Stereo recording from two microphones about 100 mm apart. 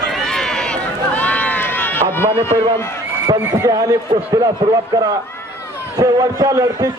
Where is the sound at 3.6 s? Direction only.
40° right (ahead or behind).